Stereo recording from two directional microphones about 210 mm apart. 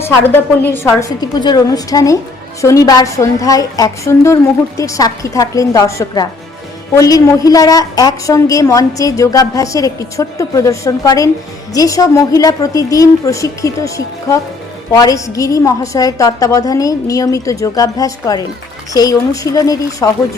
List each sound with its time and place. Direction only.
0.0 s a woman's voice: 10° left (ahead or behind)